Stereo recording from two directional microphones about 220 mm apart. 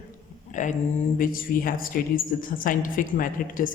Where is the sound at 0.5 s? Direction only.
35° left (ahead or behind).